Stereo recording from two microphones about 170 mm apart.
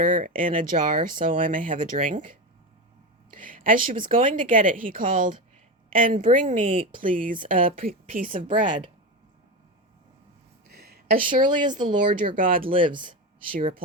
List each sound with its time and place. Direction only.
0.0 s a woman's voice: 50° right (ahead or behind)
10.7 s a sound: 70° right (ahead or behind); by 11.4 s 55° right (ahead or behind)
11.4 s speech: 25° right (ahead or behind)
12.0 s a woman's voice: 50° right (ahead or behind)
12.7 s speech: 30° right (ahead or behind)